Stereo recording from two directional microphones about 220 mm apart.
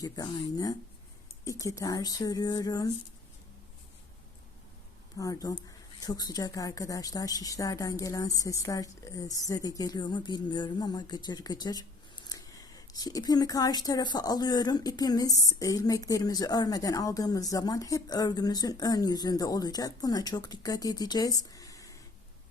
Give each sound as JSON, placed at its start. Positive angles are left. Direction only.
{"t": 0.0, "sound": "a woman's voice", "side_deg": 15}
{"t": 5.1, "sound": "a woman's voice", "side_deg": 15}
{"t": 21.5, "sound": "a sound", "side_deg": 15}